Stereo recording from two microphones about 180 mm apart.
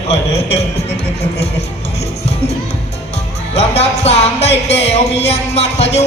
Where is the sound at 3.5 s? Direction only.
35° left (ahead or behind).